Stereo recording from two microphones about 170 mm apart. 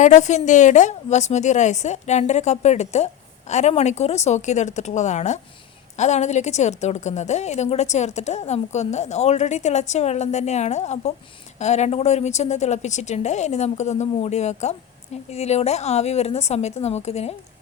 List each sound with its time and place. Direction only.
0.0 s a woman's voice: 45° left (ahead or behind)